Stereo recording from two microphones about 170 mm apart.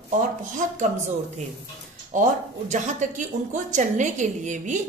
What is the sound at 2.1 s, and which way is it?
Speech, 45° right (ahead or behind).